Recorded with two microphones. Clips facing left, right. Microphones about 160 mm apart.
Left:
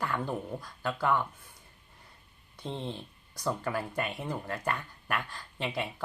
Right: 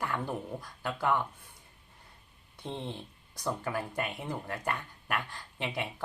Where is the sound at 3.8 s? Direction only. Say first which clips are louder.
Left 1 dB; 15° right (ahead or behind).